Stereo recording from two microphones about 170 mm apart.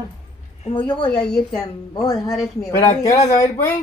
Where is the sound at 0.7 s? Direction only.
25° left (ahead or behind).